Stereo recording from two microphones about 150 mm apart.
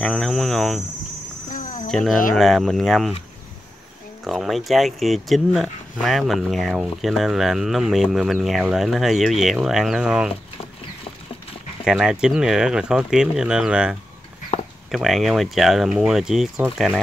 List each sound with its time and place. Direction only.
0.0 s cricket: centre (ahead or behind)
1.5 s cricket: 65° left (ahead or behind)
1.9 s speech: centre (ahead or behind)
4.2 s speech: centre (ahead or behind)
11.8 s speech: 5° right (ahead or behind)
14.5 s a sound: 50° left (ahead or behind)
14.9 s speech: centre (ahead or behind)